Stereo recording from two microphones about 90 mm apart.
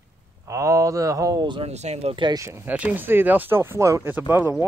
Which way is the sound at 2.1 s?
65° right (ahead or behind).